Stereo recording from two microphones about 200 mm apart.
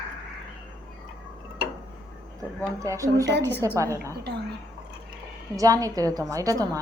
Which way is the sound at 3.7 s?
15° right (ahead or behind).